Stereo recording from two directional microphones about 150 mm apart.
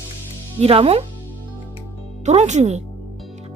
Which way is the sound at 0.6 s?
40° right (ahead or behind).